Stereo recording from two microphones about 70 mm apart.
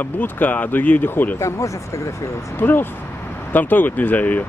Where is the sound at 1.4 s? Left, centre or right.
Left.